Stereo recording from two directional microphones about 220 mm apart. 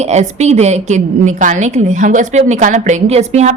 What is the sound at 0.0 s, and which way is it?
A woman's voice, 30° right (ahead or behind).